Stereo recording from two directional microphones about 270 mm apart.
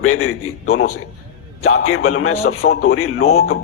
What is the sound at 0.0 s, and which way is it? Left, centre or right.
Speech, left.